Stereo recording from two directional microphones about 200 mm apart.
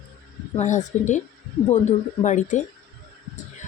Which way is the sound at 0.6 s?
35° left (ahead or behind).